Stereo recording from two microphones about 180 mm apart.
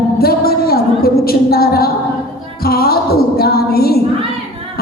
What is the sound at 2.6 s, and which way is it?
Music, 60° left (ahead or behind).